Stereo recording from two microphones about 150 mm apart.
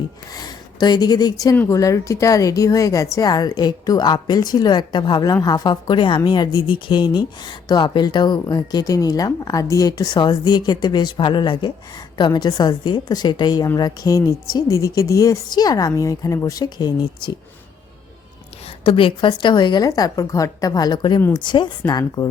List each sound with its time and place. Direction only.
0.3 s a woman's voice: 25° left (ahead or behind)
18.9 s a woman's voice: 35° left (ahead or behind)